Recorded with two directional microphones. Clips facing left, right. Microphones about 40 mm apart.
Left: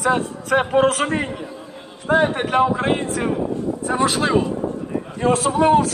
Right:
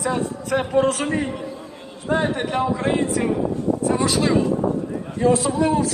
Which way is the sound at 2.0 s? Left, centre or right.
Left.